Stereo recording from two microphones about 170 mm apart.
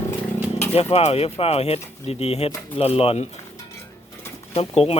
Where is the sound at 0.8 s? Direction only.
35° left (ahead or behind).